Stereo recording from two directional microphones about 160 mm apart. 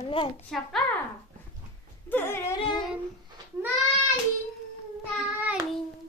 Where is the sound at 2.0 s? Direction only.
15° left (ahead or behind).